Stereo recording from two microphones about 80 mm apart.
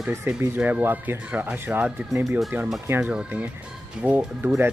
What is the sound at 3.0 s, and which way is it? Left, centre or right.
Speech, centre.